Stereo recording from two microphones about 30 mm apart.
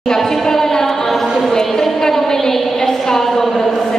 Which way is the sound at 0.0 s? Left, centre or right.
Centre.